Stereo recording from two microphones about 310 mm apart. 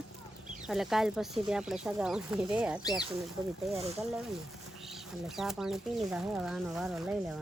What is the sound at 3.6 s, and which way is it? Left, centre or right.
Speech, centre.